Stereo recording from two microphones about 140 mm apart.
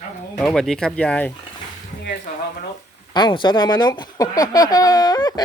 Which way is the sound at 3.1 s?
30° left (ahead or behind).